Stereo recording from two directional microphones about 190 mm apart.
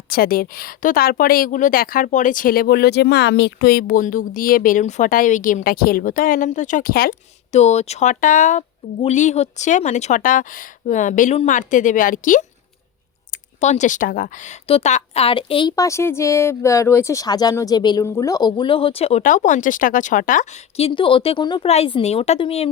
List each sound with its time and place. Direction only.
0.1 s speech: 50° left (ahead or behind)
7.5 s speech: 35° left (ahead or behind)
13.6 s a woman's voice: 40° left (ahead or behind)